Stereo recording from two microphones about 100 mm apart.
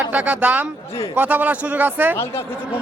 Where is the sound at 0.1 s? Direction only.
15° right (ahead or behind).